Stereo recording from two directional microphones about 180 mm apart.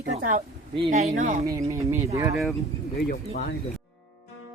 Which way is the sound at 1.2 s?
40° right (ahead or behind).